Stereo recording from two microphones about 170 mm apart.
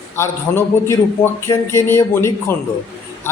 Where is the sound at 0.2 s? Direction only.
15° left (ahead or behind).